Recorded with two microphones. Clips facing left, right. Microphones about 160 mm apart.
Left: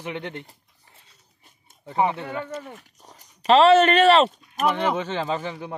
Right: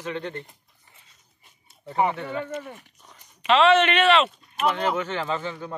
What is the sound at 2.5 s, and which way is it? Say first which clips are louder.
Speech: right 1 dB; 35° left (ahead or behind).